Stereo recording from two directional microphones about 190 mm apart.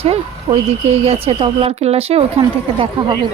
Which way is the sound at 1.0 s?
30° right (ahead or behind).